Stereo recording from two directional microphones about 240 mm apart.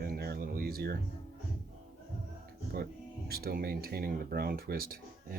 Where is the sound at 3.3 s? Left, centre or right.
Right.